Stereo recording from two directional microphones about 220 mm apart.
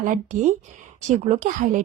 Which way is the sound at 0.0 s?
35° right (ahead or behind).